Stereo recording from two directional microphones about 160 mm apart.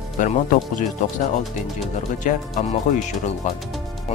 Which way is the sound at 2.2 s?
50° left (ahead or behind).